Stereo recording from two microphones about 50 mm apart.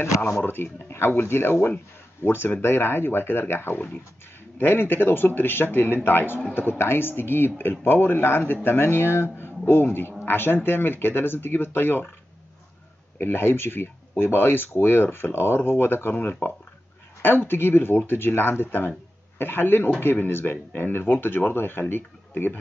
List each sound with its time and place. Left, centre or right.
0.3 s speech: left
13.2 s speech: left
16.2 s speech: left